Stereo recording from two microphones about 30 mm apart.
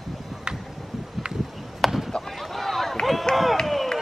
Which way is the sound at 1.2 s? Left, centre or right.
Right.